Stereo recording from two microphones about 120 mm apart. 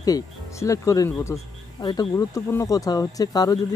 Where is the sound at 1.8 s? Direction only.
40° left (ahead or behind).